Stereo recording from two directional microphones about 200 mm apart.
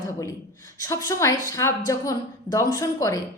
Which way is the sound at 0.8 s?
15° left (ahead or behind).